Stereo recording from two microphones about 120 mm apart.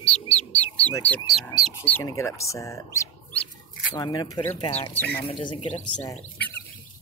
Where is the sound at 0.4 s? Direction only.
15° left (ahead or behind).